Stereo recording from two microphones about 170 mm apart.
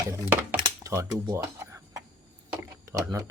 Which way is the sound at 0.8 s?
15° right (ahead or behind).